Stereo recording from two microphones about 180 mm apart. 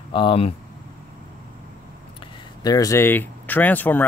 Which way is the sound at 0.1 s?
30° left (ahead or behind).